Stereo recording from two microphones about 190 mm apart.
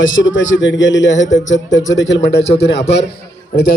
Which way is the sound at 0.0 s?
90° left.